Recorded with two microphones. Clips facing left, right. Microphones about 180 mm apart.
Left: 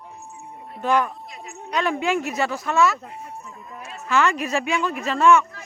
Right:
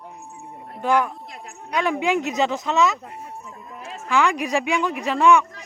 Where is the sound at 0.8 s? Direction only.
15° right (ahead or behind).